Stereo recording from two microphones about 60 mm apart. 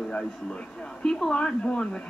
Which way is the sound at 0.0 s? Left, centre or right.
Centre.